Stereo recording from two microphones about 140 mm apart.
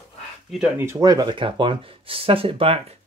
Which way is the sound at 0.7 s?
20° right (ahead or behind).